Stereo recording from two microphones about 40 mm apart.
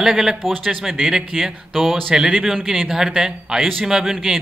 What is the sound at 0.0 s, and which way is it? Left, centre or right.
Speech, centre.